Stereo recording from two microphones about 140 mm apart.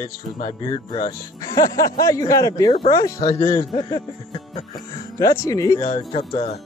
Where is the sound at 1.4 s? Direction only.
25° left (ahead or behind).